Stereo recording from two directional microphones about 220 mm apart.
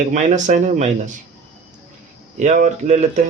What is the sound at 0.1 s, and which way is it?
Speech, 35° right (ahead or behind).